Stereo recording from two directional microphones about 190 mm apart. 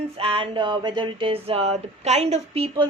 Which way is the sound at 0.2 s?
30° right (ahead or behind).